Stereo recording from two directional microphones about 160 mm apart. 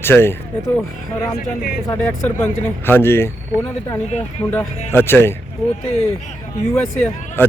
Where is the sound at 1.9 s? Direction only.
15° left (ahead or behind).